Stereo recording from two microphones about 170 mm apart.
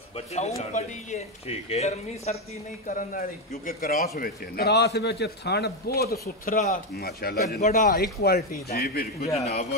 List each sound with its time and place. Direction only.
0.6 s a man's voice: 40° left (ahead or behind)
2.9 s a man's voice: 50° left (ahead or behind); by 6.0 s 70° left (ahead or behind)
6.4 s a man's voice: 55° left (ahead or behind)
7.6 s a man's voice: 50° left (ahead or behind)
9.2 s a man's voice: 40° left (ahead or behind)